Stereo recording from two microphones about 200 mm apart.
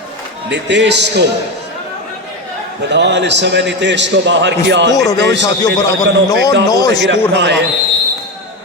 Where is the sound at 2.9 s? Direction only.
60° right (ahead or behind).